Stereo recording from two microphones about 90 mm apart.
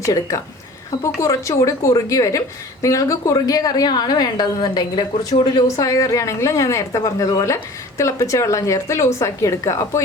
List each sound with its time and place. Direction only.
0.0 s a woman's voice: 40° left (ahead or behind)
5.5 s a woman's voice: 40° left (ahead or behind)